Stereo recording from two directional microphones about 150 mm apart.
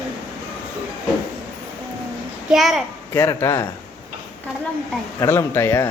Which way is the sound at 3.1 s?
15° left (ahead or behind).